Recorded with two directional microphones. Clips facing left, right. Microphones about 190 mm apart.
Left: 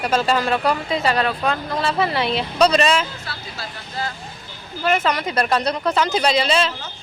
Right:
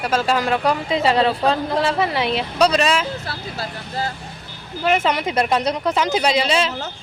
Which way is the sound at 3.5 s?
35° right (ahead or behind).